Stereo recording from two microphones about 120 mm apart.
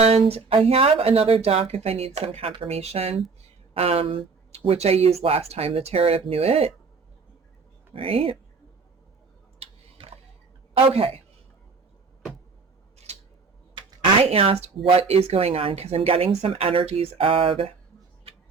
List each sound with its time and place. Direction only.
0.0 s speech: 55° right (ahead or behind)
7.9 s speech: 50° right (ahead or behind)
10.8 s speech: 55° right (ahead or behind)
13.7 s a sound: 50° right (ahead or behind)
14.8 s speech: 55° right (ahead or behind)